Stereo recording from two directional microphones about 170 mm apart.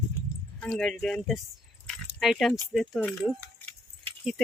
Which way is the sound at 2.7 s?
Centre (ahead or behind).